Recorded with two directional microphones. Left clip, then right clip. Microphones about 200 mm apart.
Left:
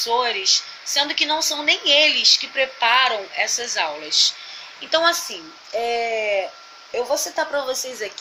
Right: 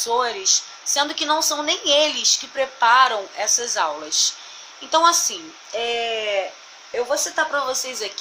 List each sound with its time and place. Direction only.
0.0 s a woman's voice: 20° right (ahead or behind)
5.7 s speech: 5° right (ahead or behind)